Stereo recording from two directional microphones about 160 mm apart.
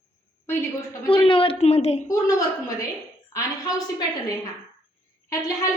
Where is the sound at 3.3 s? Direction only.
25° left (ahead or behind).